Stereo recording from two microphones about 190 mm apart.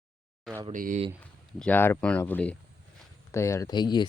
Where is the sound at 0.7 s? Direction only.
45° right (ahead or behind).